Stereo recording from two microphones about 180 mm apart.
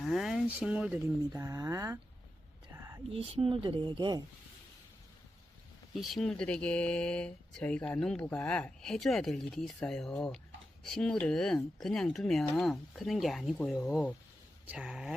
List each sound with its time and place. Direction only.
0.0 s speech: centre (ahead or behind)
1.4 s speech: 20° right (ahead or behind)
2.8 s a sound: 25° right (ahead or behind)
3.2 s speech: 30° right (ahead or behind)
6.0 s speech: centre (ahead or behind)